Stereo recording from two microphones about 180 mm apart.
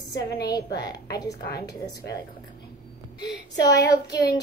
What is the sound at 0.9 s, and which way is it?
A woman's voice, 20° left (ahead or behind).